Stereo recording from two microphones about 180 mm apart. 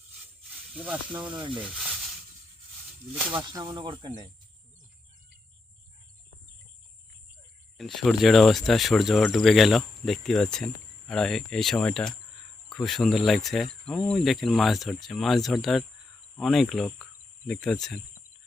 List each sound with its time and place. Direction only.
0.7 s speech: 5° right (ahead or behind)
1.3 s speech: 25° right (ahead or behind)
3.3 s speech: 25° right (ahead or behind)
7.8 s speech: centre (ahead or behind)